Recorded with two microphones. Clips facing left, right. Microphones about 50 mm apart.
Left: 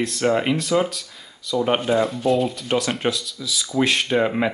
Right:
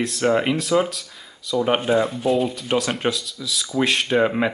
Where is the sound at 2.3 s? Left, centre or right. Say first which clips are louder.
Even; centre.